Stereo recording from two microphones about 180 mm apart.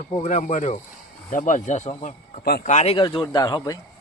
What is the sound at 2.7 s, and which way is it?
Speech, 40° left (ahead or behind).